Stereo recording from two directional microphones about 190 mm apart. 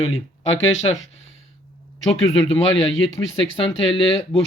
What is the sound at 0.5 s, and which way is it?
Speech, 30° left (ahead or behind).